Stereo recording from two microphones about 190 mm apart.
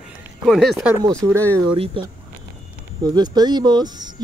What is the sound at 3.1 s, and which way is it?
Speech, 20° right (ahead or behind).